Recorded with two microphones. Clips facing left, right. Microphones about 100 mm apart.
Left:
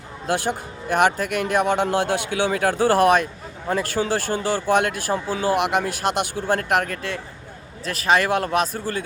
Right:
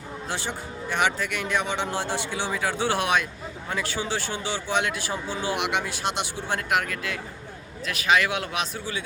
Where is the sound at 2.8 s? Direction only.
45° left (ahead or behind).